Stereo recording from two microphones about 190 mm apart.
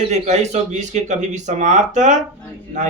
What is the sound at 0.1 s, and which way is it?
A man's voice, 35° right (ahead or behind).